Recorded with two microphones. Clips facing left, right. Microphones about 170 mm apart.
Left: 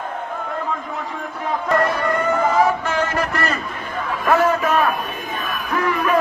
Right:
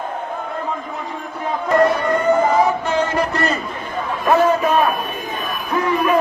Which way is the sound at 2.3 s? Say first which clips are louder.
Right 2 dB; 20° right (ahead or behind).